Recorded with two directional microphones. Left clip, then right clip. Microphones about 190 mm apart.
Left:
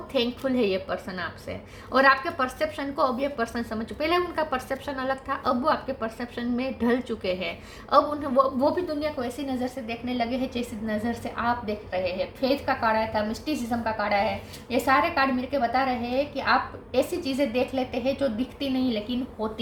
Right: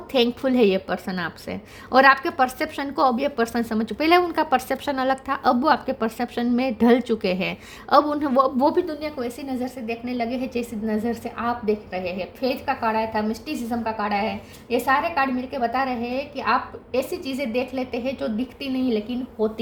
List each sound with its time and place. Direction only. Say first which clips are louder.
0.1 s a woman's voice: right 5 dB; 55° right (ahead or behind)